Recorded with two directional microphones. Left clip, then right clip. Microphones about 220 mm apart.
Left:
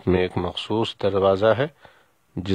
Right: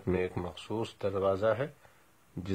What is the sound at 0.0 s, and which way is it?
Speech, 40° left (ahead or behind).